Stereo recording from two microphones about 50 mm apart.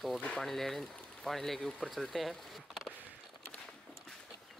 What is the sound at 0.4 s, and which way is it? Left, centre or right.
Speech, centre.